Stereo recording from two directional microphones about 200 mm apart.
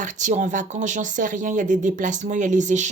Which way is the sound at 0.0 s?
40° right (ahead or behind).